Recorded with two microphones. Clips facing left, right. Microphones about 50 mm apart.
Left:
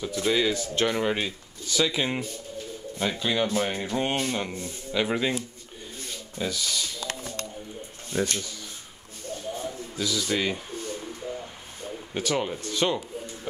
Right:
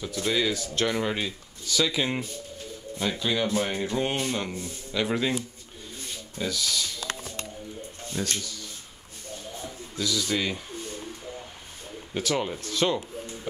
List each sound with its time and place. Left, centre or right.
0.0 s speech: centre
6.3 s speech: centre
8.1 s speech: centre
9.6 s a sound: centre
12.1 s speech: centre